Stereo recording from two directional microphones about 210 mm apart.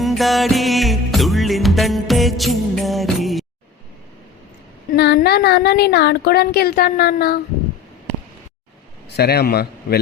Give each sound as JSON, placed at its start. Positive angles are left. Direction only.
{"t": 0.0, "sound": "music", "side_deg": 0}
{"t": 4.9, "sound": "speech", "side_deg": 50}
{"t": 9.1, "sound": "speech", "side_deg": 50}